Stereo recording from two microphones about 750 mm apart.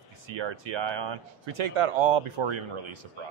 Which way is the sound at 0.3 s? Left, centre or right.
Right.